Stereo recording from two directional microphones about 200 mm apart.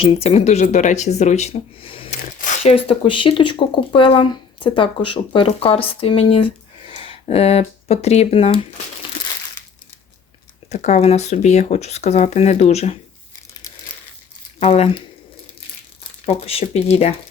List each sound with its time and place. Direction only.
0.0 s speech: 30° left (ahead or behind)
10.7 s speech: 35° left (ahead or behind)
14.6 s speech: 30° left (ahead or behind)
16.2 s speech: 30° left (ahead or behind)